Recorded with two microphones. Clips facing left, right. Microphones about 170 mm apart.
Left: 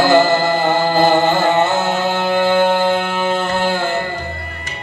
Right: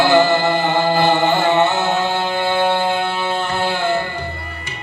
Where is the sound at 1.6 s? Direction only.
45° left (ahead or behind).